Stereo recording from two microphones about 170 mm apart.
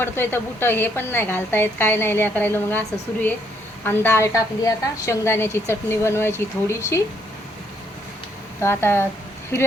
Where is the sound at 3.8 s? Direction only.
10° left (ahead or behind).